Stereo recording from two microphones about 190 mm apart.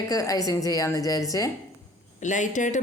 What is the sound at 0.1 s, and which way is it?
A woman's voice, 20° left (ahead or behind).